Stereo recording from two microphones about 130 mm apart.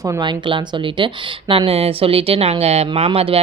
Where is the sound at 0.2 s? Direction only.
40° right (ahead or behind).